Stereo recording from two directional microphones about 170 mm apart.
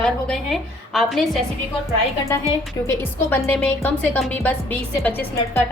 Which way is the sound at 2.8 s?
15° left (ahead or behind).